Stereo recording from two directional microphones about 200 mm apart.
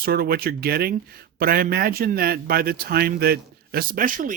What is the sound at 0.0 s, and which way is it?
Speech, 50° right (ahead or behind).